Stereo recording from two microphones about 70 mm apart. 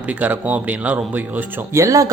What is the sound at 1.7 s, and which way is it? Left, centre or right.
Speech, right.